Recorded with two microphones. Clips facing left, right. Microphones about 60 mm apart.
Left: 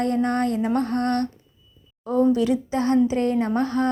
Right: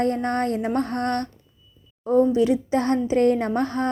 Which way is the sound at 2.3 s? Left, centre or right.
Right.